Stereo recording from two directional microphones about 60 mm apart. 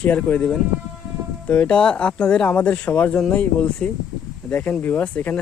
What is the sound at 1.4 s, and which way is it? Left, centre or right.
Speech, centre.